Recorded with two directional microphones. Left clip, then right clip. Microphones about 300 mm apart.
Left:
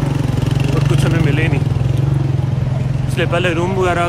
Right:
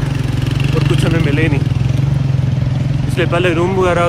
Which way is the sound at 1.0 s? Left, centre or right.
Centre.